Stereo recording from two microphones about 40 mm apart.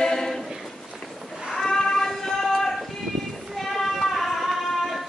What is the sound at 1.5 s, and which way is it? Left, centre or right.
Child singing, centre.